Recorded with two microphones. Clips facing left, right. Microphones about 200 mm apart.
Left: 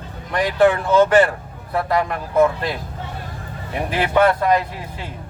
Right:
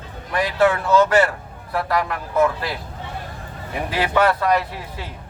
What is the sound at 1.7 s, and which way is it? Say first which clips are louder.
Speech: left 2 dB; 25° left (ahead or behind).